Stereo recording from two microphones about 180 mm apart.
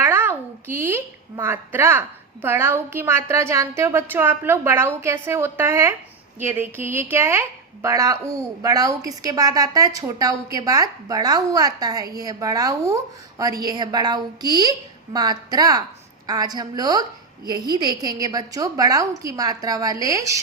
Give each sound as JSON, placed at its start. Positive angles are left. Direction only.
{"t": 0.0, "sound": "a woman's voice", "side_deg": -15}